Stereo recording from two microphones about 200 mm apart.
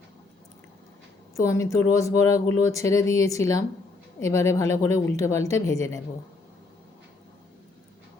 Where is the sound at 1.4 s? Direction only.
15° left (ahead or behind).